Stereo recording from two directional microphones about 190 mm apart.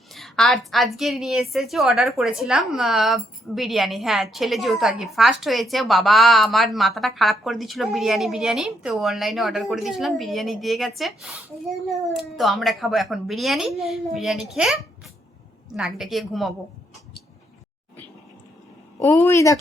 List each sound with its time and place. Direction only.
0.1 s a woman's voice: centre (ahead or behind)
18.9 s speech: 15° left (ahead or behind)